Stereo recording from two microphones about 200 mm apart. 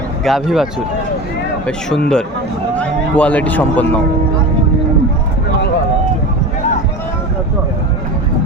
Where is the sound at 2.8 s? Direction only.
5° left (ahead or behind).